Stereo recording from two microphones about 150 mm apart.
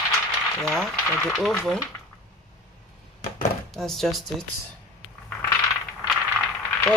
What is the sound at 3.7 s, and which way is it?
Speech, centre (ahead or behind).